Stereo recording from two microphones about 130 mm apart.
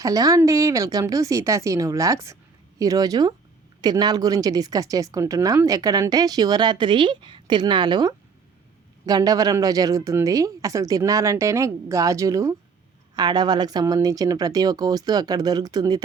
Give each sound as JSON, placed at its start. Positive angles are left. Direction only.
{"t": 0.0, "sound": "a woman's voice", "side_deg": -25}